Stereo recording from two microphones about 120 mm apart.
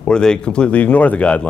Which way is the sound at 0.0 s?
5° left (ahead or behind).